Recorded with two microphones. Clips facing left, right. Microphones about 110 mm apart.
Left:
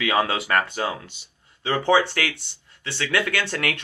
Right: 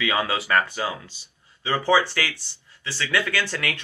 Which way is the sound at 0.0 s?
65° left (ahead or behind).